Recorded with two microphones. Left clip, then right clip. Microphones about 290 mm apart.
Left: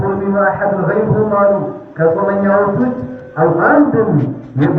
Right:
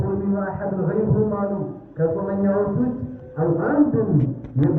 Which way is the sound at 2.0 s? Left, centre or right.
Left.